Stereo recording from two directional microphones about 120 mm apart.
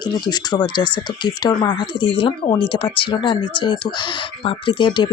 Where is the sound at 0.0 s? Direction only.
35° left (ahead or behind).